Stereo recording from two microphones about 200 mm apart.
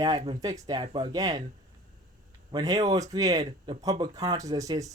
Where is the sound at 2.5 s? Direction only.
15° right (ahead or behind).